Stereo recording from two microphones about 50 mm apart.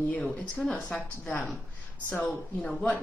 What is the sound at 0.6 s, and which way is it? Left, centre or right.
Speech, centre.